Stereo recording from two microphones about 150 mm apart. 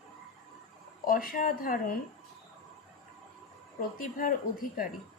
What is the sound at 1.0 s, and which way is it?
Speech, 70° left (ahead or behind).